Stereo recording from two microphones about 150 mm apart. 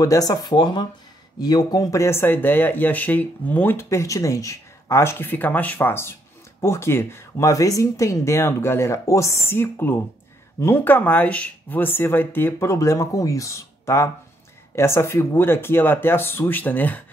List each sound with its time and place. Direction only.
0.0 s speech: 25° left (ahead or behind)